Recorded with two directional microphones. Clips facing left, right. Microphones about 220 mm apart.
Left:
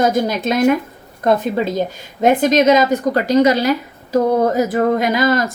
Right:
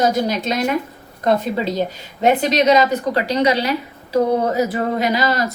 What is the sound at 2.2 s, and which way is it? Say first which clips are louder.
A woman's voice: left 3 dB; 50° left (ahead or behind).